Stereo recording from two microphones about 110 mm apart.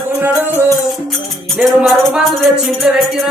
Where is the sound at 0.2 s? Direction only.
20° right (ahead or behind).